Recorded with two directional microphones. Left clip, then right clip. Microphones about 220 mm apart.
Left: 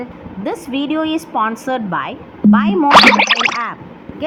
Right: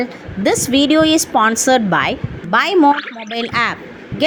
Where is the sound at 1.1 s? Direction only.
25° right (ahead or behind).